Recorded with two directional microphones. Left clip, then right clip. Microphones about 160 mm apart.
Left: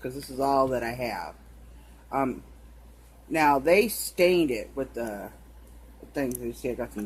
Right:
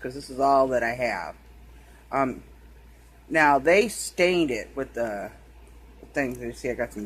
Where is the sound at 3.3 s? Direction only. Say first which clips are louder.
Right 2 dB; 15° right (ahead or behind).